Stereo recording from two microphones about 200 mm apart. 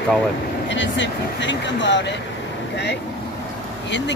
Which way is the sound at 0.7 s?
65° left (ahead or behind).